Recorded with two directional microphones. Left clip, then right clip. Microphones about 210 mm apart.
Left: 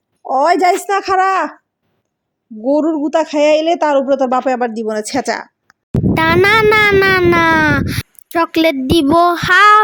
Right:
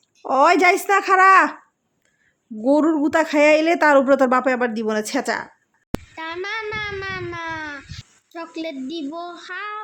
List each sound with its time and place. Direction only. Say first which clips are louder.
0.3 s speech: left 3 dB; 5° left (ahead or behind)
2.6 s speech: left 3 dB; 5° left (ahead or behind)
6.1 s speech: left 19 dB; 50° left (ahead or behind)